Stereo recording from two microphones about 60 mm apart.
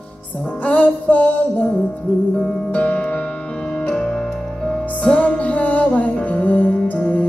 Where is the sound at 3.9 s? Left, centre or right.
Centre.